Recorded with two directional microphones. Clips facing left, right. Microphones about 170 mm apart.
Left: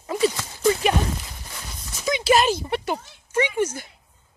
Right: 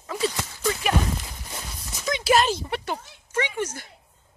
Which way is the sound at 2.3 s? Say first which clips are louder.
Left 1 dB; 5° left (ahead or behind).